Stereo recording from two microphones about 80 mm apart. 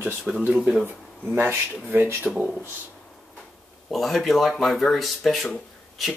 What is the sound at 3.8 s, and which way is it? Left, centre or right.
Speech, centre.